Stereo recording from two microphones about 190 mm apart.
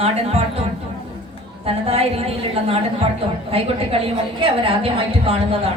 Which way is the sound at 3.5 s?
30° right (ahead or behind).